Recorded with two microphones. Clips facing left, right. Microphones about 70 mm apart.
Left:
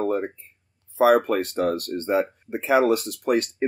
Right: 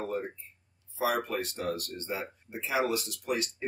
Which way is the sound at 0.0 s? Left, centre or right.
Left.